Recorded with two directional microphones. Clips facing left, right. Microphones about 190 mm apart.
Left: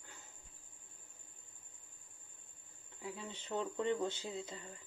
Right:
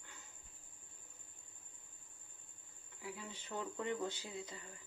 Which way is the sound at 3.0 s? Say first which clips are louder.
Left 3 dB; 25° left (ahead or behind).